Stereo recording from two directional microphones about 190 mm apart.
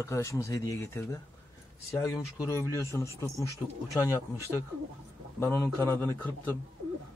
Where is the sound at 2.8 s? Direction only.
15° left (ahead or behind).